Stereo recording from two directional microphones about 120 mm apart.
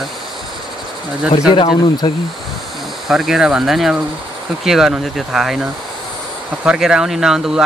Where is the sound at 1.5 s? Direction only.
40° left (ahead or behind).